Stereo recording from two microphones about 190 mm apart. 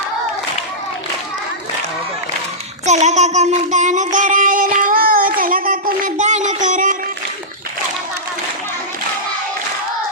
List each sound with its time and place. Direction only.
2.8 s child singing: 35° right (ahead or behind)